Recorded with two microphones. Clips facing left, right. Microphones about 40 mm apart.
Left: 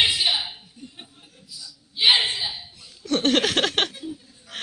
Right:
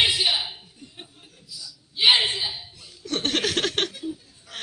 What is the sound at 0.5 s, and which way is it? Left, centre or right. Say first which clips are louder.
Chuckle: left 1 dB; centre.